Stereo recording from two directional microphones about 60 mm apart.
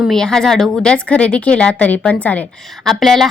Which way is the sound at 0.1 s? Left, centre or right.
Centre.